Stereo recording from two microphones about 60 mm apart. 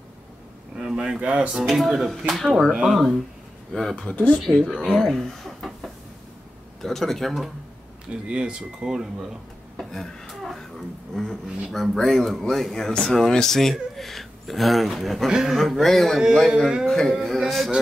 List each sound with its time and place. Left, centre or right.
0.7 s speech: centre
1.6 s speech: centre
4.1 s speech: left
4.5 s speech: centre
4.9 s a sound: centre
6.8 s speech: centre
8.1 s speech: centre
9.8 s a sound: centre
11.7 s speech: centre
16.8 s speech: centre